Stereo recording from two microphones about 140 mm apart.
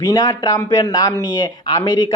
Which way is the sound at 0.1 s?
25° left (ahead or behind).